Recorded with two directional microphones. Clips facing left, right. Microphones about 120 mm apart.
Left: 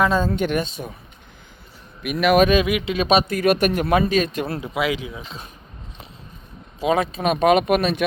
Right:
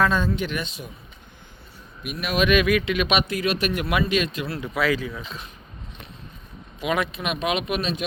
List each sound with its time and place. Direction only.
0.3 s speech: 50° left (ahead or behind)
2.0 s speech: 85° left
2.5 s speech: 25° left (ahead or behind); by 4.6 s 50° left (ahead or behind)
4.6 s speech: 20° left (ahead or behind)
6.7 s speech: 30° left (ahead or behind); by 8.0 s 55° left (ahead or behind)